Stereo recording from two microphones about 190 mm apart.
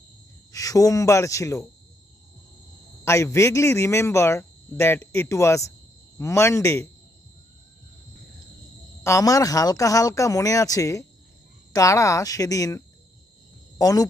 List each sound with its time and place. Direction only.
0.5 s speech: 20° left (ahead or behind)
3.0 s speech: 15° left (ahead or behind)
9.0 s speech: 15° left (ahead or behind)